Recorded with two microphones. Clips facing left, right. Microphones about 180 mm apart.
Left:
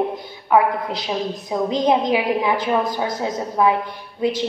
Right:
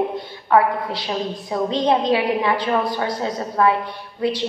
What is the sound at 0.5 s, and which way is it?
A woman's voice, 10° left (ahead or behind).